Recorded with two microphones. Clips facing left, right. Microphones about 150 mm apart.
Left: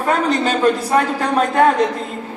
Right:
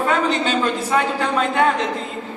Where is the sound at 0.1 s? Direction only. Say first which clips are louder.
Left 6 dB; 40° left (ahead or behind).